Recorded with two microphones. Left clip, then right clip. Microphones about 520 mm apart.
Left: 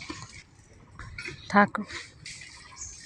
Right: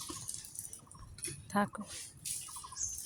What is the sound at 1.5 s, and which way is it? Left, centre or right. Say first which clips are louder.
Speech: left 13 dB; right.